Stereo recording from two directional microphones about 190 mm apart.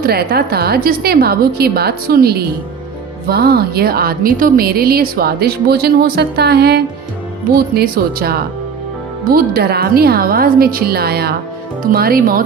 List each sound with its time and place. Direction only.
0.0 s a woman's voice: 55° right (ahead or behind)